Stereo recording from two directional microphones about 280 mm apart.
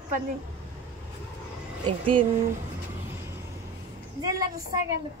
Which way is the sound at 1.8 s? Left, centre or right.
Centre.